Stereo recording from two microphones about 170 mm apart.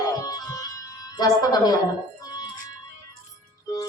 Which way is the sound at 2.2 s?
25° left (ahead or behind).